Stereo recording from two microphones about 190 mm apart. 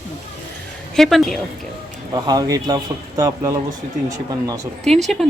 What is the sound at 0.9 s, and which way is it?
Speech, centre (ahead or behind).